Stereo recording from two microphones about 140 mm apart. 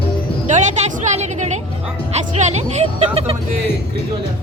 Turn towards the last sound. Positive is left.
turn(degrees=-45)  # may be behind; listen again after turning